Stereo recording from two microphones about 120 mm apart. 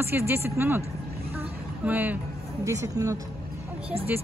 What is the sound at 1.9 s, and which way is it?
Speech, 15° right (ahead or behind).